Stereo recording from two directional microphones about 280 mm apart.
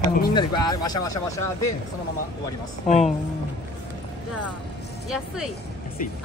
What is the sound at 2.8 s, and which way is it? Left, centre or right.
Speech, left.